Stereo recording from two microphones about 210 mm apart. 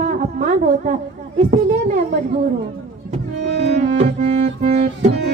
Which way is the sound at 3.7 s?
30° right (ahead or behind).